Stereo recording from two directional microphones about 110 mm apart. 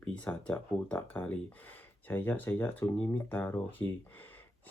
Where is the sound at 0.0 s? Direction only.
10° left (ahead or behind).